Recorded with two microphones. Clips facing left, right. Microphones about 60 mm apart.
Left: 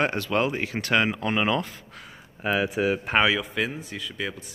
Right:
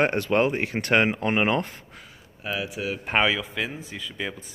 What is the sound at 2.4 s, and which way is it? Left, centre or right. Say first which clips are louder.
Speech: left 6 dB; left.